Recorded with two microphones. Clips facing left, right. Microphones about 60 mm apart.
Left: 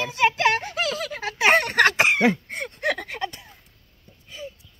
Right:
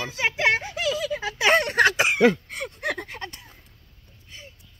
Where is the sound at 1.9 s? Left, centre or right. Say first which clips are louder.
Even; left.